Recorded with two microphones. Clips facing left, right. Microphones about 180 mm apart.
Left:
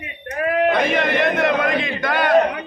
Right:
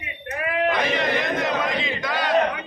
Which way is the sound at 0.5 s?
55° left (ahead or behind).